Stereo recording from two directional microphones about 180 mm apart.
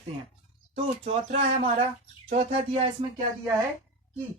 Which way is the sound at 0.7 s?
35° right (ahead or behind).